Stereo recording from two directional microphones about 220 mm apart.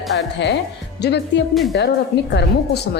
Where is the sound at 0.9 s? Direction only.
50° left (ahead or behind).